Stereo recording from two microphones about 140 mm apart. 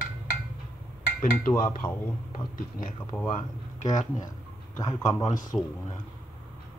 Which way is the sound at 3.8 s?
60° left (ahead or behind).